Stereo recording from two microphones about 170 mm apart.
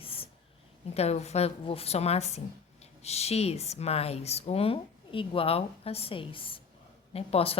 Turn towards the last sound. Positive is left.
turn(degrees=35)  # may be behind; listen again after turning